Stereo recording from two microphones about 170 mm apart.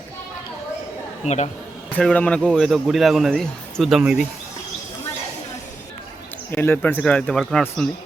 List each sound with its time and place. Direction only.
1.2 s speech: 40° left (ahead or behind)
1.9 s speech: 10° left (ahead or behind)
6.5 s speech: 10° left (ahead or behind)